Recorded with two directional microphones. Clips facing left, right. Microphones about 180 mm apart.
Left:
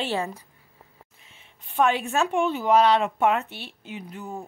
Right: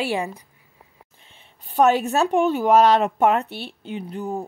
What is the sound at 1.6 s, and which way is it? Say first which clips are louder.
A woman's voice: right 5 dB; 40° right (ahead or behind).